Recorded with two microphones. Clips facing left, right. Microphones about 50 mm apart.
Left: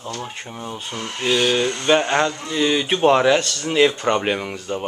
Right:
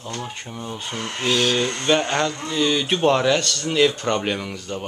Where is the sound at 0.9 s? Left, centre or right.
Right.